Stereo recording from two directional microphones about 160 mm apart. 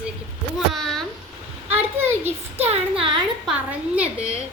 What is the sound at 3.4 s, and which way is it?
Speech, 5° right (ahead or behind).